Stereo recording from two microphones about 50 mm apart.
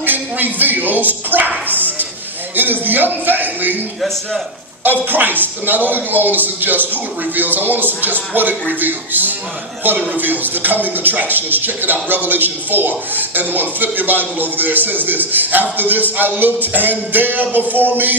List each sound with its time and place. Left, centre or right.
0.0 s speech: right
1.7 s a sound: right
2.5 s speech: right
5.0 s speech: right